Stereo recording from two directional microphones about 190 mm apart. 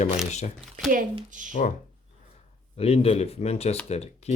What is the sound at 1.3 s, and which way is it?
Speech, 40° right (ahead or behind).